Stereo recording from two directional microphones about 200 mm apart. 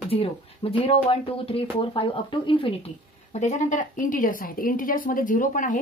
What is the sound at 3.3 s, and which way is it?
Speech, 35° left (ahead or behind).